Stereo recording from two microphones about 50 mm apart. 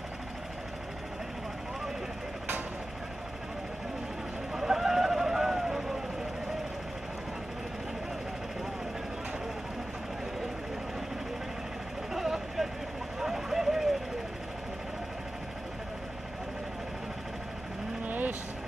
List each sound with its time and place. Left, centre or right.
4.6 s a sound: centre
12.1 s vehicle: centre
18.0 s vehicle: right